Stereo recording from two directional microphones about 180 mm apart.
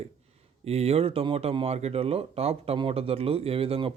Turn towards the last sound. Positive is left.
turn(degrees=-30)  # may be behind; listen again after turning